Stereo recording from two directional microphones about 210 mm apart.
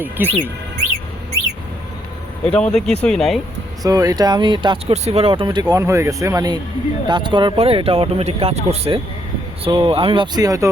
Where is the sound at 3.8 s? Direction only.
15° right (ahead or behind).